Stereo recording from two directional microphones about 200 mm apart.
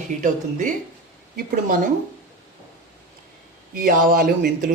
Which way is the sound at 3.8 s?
45° right (ahead or behind).